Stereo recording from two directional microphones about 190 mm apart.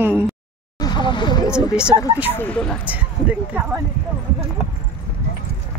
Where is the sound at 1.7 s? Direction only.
5° right (ahead or behind).